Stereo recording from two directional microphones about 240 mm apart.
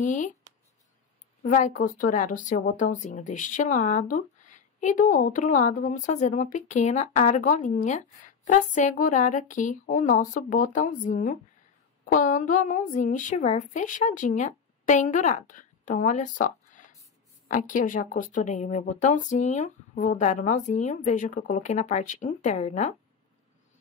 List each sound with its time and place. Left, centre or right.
0.0 s speech: left
1.4 s speech: left